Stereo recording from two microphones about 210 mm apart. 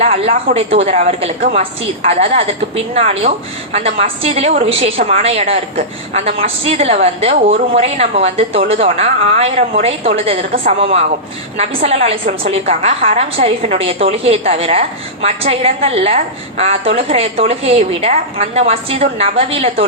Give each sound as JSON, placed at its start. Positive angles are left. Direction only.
{"t": 0.0, "sound": "a woman's voice", "side_deg": -30}
{"t": 1.4, "sound": "a woman's voice", "side_deg": -45}
{"t": 2.0, "sound": "a woman's voice", "side_deg": -30}
{"t": 10.5, "sound": "a woman's voice", "side_deg": -45}
{"t": 10.8, "sound": "a woman's voice", "side_deg": -30}